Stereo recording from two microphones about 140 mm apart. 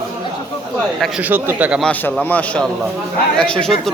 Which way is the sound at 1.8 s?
10° left (ahead or behind).